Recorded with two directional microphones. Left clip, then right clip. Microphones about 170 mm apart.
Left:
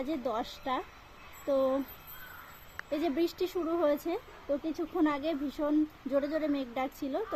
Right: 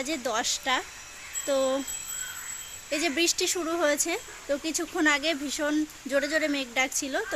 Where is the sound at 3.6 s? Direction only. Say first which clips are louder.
Even; 30° right (ahead or behind).